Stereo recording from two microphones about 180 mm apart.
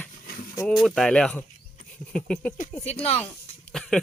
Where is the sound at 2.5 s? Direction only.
45° left (ahead or behind).